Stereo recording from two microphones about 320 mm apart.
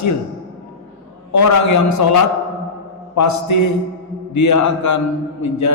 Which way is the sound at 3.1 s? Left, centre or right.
Left.